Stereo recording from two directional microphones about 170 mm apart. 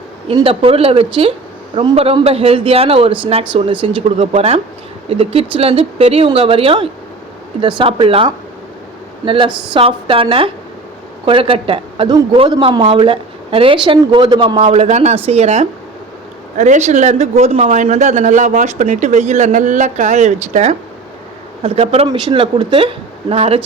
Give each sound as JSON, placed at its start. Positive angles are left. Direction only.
{"t": 0.4, "sound": "a man's voice", "side_deg": -35}
{"t": 9.5, "sound": "speech", "side_deg": -5}
{"t": 9.7, "sound": "a man's voice", "side_deg": -30}